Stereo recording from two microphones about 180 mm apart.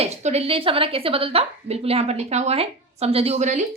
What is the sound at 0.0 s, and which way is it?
A woman's voice, 35° right (ahead or behind).